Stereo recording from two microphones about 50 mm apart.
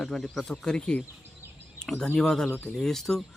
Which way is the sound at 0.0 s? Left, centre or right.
Centre.